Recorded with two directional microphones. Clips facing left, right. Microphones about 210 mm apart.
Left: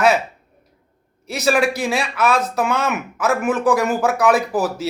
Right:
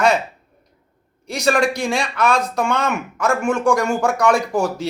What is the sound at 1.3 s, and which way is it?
Speech, 5° left (ahead or behind).